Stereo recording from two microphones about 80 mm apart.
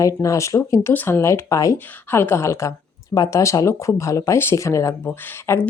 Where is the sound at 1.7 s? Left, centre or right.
Left.